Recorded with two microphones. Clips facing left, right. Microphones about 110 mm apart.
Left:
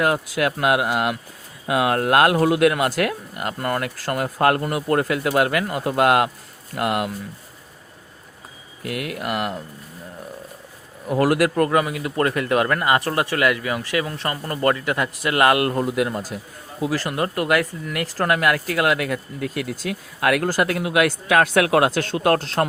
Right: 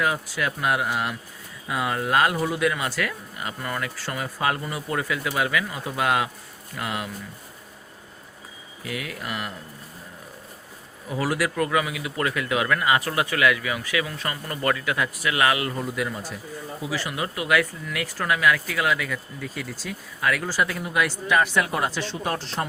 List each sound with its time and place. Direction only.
0.0 s speech: 65° left (ahead or behind)
8.8 s speech: 60° left (ahead or behind)
11.1 s speech: 50° left (ahead or behind)
16.8 s speech: 50° left (ahead or behind); by 22.4 s 80° left
22.6 s speech: 55° left (ahead or behind)